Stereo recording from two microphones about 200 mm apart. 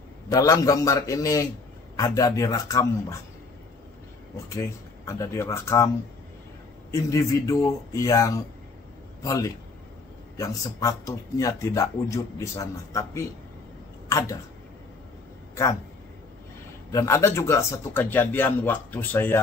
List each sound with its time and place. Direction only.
0.3 s a man's voice: 20° left (ahead or behind)
4.5 s a man's voice: 15° left (ahead or behind)
6.9 s a man's voice: 15° left (ahead or behind)
16.9 s a man's voice: 15° left (ahead or behind)